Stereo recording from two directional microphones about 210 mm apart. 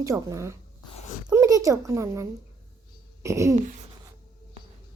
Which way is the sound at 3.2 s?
15° right (ahead or behind).